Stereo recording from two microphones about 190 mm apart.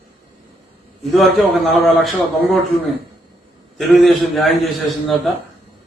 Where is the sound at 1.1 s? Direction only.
Centre (ahead or behind).